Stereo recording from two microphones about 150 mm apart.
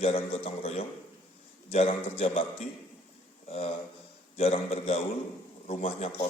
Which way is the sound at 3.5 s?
40° left (ahead or behind).